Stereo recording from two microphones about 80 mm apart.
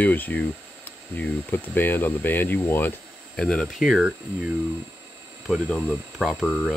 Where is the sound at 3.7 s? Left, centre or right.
Centre.